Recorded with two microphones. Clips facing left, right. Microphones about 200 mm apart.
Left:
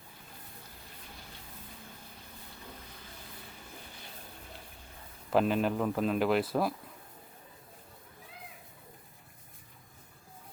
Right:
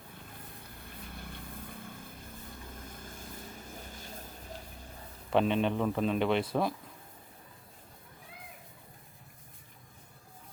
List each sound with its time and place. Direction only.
1.1 s vehicle: 55° right (ahead or behind)
2.9 s vehicle: 45° right (ahead or behind)
5.3 s a man's voice: 5° left (ahead or behind)